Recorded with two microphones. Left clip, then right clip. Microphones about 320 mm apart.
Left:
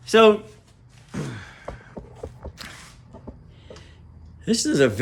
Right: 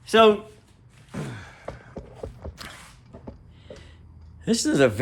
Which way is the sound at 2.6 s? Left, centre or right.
Centre.